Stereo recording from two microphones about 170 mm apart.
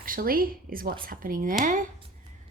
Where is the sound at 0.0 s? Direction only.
55° right (ahead or behind).